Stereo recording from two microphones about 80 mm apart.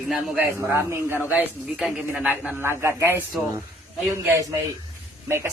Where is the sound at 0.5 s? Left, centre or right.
Right.